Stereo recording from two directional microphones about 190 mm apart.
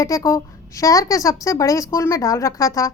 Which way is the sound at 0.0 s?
15° left (ahead or behind).